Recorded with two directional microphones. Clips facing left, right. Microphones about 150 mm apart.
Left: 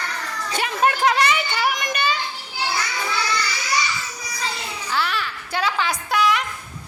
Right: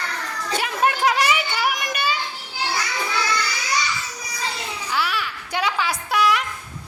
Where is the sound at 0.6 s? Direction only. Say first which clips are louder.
Left 2 dB; centre (ahead or behind).